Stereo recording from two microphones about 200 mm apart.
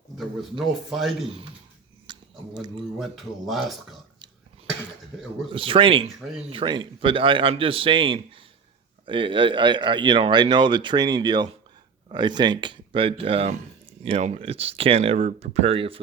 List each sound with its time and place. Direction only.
0.6 s speech: centre (ahead or behind)
2.1 s a sound: 20° right (ahead or behind)
3.0 s speech: centre (ahead or behind)
5.5 s speech: 25° right (ahead or behind)